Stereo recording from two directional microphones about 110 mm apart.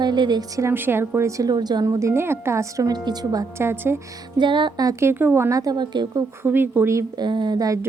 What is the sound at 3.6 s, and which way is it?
Speech, 20° right (ahead or behind).